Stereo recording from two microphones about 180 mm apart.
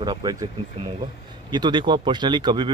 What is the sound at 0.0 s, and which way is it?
Speech, 25° right (ahead or behind).